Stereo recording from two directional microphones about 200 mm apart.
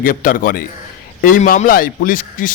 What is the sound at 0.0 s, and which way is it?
A man's voice, 45° left (ahead or behind).